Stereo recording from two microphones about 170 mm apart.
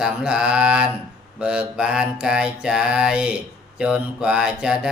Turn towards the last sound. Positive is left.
turn(degrees=-5)  # may be behind; listen again after turning